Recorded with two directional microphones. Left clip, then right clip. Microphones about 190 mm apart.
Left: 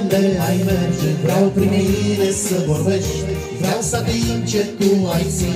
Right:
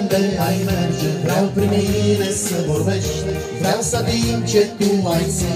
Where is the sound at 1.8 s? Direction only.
55° right (ahead or behind).